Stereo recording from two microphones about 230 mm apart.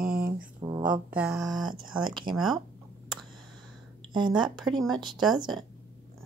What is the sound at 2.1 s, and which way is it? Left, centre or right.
Speech, centre.